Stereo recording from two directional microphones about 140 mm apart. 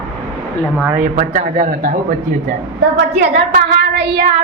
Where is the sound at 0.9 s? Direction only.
90° right.